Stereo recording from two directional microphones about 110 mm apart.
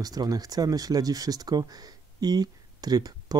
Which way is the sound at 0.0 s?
35° right (ahead or behind).